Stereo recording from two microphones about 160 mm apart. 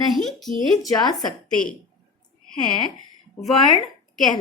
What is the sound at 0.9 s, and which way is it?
Speech, 25° left (ahead or behind).